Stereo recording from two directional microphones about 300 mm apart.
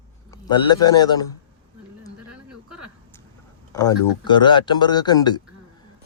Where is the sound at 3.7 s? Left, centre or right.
Centre.